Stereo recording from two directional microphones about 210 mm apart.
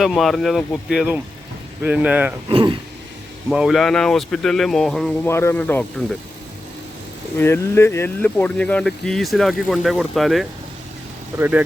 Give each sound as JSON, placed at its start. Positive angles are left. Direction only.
{"t": 0.0, "sound": "speech", "side_deg": 0}
{"t": 2.5, "sound": "speech", "side_deg": -25}
{"t": 3.5, "sound": "speech", "side_deg": 0}
{"t": 7.3, "sound": "speech", "side_deg": 10}